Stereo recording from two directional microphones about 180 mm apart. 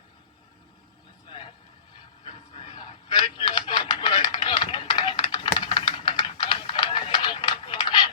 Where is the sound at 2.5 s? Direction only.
25° left (ahead or behind).